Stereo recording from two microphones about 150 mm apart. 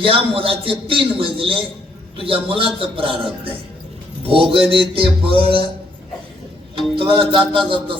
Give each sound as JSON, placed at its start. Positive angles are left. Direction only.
{"t": 0.0, "sound": "a man's voice", "side_deg": -35}
{"t": 4.2, "sound": "a man's voice", "side_deg": -35}
{"t": 6.7, "sound": "a man's voice", "side_deg": -35}